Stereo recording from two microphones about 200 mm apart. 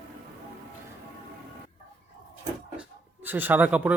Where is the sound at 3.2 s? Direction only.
10° right (ahead or behind).